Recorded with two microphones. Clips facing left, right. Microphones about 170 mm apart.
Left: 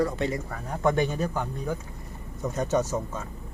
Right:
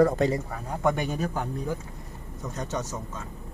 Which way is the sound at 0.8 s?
10° right (ahead or behind).